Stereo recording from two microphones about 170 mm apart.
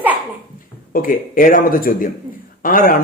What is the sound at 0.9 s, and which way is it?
A man's voice, 55° left (ahead or behind).